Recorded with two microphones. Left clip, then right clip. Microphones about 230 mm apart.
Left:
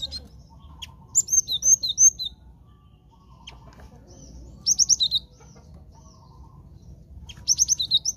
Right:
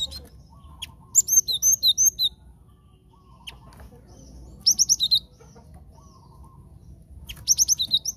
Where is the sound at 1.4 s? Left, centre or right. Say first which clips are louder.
Left 1 dB; right.